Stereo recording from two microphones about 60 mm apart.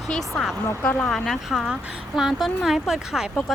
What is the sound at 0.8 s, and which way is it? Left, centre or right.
Speech, left.